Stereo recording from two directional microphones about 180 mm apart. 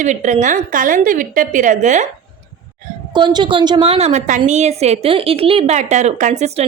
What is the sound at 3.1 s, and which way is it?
A woman's voice, 25° right (ahead or behind).